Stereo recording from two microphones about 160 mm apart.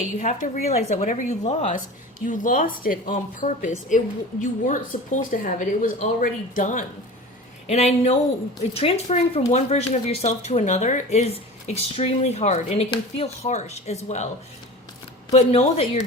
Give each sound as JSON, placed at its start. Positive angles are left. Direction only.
{"t": 0.0, "sound": "a woman's voice", "side_deg": 50}
{"t": 7.7, "sound": "a woman's voice", "side_deg": 40}
{"t": 15.3, "sound": "speech", "side_deg": 40}